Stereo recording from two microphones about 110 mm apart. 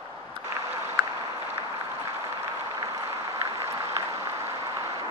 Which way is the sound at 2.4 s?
25° right (ahead or behind).